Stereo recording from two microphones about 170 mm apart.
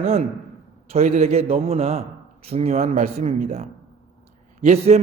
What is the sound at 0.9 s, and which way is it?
A man's voice, 40° right (ahead or behind).